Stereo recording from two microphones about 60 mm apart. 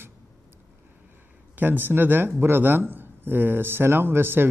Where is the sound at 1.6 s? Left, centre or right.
Right.